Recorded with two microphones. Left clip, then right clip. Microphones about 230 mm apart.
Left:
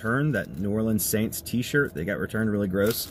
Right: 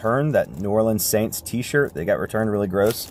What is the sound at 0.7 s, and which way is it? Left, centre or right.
Speech, right.